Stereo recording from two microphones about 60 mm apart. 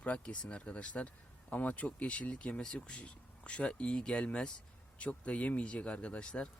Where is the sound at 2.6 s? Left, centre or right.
Centre.